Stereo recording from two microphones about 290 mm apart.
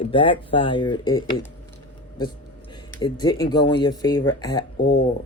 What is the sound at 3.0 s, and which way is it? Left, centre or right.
Speech, centre.